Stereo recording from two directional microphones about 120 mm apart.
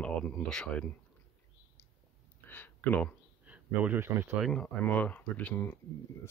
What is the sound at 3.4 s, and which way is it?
Speech, 10° right (ahead or behind).